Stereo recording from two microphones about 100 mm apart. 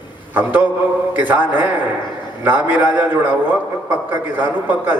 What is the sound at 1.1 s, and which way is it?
A man's voice, 20° right (ahead or behind).